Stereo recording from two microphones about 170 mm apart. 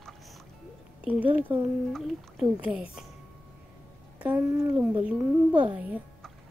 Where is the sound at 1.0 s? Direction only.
10° right (ahead or behind).